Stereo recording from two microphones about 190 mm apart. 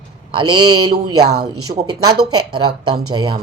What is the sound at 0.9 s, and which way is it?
Speech, 60° right (ahead or behind).